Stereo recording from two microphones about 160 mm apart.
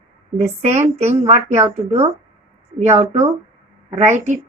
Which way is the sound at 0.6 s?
45° right (ahead or behind).